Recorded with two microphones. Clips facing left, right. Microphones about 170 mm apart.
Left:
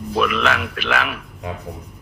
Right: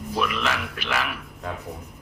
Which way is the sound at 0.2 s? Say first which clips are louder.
Left 6 dB; 75° left (ahead or behind).